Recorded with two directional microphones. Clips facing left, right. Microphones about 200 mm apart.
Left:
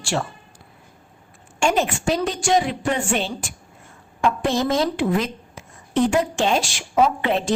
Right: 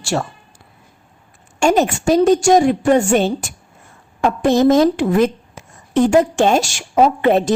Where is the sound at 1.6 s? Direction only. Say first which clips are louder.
Right 6 dB; 40° right (ahead or behind).